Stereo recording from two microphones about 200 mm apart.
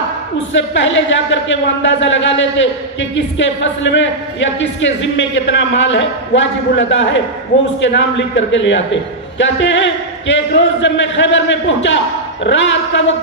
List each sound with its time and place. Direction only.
0.5 s a man's voice: 65° left (ahead or behind)